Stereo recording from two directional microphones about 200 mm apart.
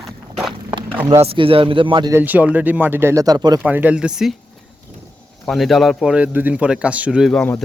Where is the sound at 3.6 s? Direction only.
5° right (ahead or behind).